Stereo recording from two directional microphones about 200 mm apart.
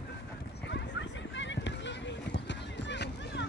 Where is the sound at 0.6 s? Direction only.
60° left (ahead or behind).